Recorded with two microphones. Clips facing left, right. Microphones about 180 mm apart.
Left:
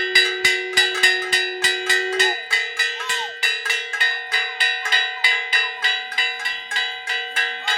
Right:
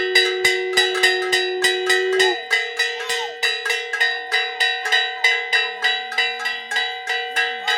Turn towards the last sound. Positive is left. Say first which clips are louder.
# right 4 dB
turn(degrees=-40)  # may be behind; listen again after turning